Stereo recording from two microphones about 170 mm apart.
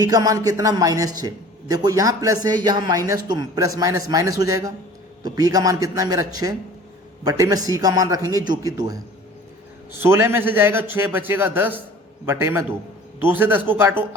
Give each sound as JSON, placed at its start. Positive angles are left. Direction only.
{"t": 0.0, "sound": "a man's voice", "side_deg": -20}
{"t": 10.0, "sound": "a man's voice", "side_deg": -15}